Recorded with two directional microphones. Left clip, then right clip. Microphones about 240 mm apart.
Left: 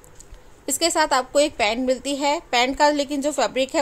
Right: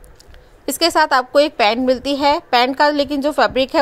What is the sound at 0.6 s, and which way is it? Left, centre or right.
A woman's voice, centre.